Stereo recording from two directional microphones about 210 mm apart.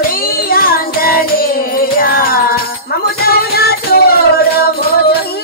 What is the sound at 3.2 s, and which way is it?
Music, 50° left (ahead or behind).